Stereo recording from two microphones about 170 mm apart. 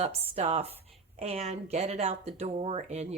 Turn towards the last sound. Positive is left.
turn(degrees=-40)  # may be behind; listen again after turning